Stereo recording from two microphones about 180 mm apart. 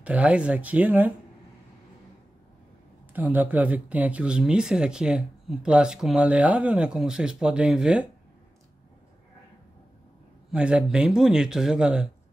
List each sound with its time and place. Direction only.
0.0 s speech: 5° right (ahead or behind)
3.1 s speech: 10° right (ahead or behind)
10.5 s speech: 5° right (ahead or behind)